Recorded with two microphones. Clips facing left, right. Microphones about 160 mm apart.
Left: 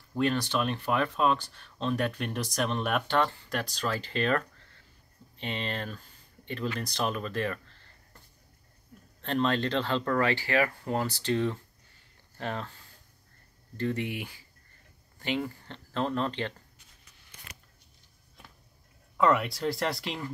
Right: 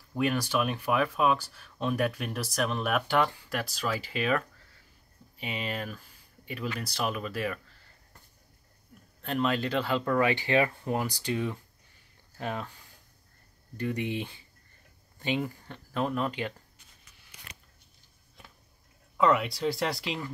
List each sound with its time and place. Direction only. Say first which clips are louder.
0.1 s speech: even; 10° right (ahead or behind)
9.2 s speech: left 1 dB; 5° right (ahead or behind)
13.7 s speech: even; 15° right (ahead or behind)
19.1 s speech: even; centre (ahead or behind)